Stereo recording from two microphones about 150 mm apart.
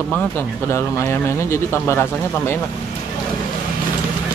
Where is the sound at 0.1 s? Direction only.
10° left (ahead or behind).